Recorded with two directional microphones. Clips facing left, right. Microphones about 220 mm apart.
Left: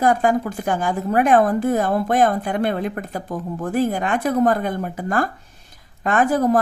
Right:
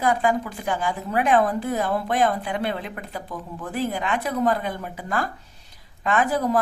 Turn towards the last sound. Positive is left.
turn(degrees=50)  # may be behind; listen again after turning